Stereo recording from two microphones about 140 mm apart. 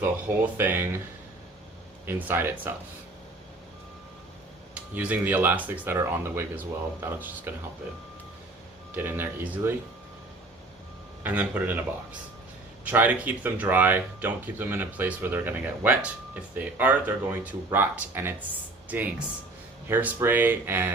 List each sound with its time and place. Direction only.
0.5 s speech: 15° right (ahead or behind)
2.0 s speech: 15° right (ahead or behind)
4.7 s speech: 10° right (ahead or behind)
9.0 s speech: 15° right (ahead or behind)
11.2 s speech: 10° right (ahead or behind)